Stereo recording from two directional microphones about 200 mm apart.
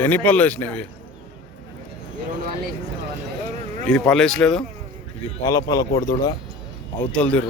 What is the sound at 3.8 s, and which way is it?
Speech, 5° left (ahead or behind).